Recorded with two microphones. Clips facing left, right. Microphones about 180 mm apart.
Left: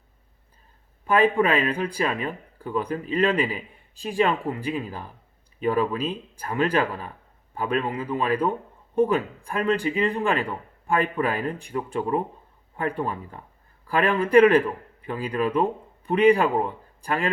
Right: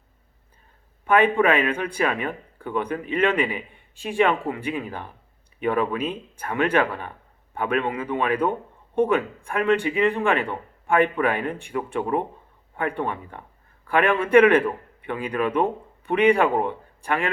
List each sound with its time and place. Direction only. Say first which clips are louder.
1.0 s speech: right 2 dB; 35° left (ahead or behind)